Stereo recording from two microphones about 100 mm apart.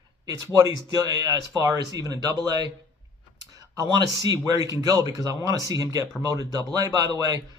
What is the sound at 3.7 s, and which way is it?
Speech, 40° right (ahead or behind).